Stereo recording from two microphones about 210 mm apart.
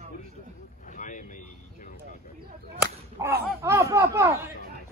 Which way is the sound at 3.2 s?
10° right (ahead or behind).